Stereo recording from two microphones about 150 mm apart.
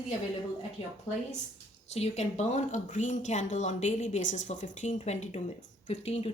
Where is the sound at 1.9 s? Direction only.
45° left (ahead or behind).